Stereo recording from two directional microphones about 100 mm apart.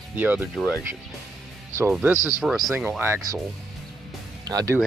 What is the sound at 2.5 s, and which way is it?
Speech, 5° right (ahead or behind).